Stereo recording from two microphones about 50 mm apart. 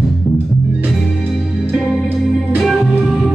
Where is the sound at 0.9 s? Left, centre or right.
Centre.